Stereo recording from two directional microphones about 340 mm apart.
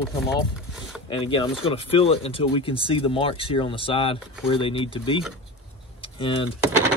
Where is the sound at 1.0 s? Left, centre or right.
Centre.